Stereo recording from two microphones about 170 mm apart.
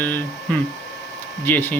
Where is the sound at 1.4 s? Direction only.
10° left (ahead or behind).